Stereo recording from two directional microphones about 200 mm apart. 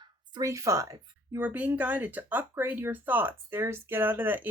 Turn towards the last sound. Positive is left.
turn(degrees=-10)  # may be behind; listen again after turning